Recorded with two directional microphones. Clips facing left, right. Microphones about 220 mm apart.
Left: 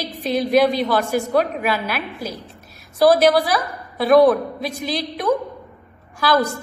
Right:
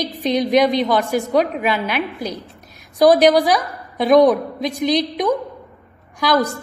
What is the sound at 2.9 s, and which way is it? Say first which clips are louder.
A woman's voice: right 2 dB; 15° right (ahead or behind).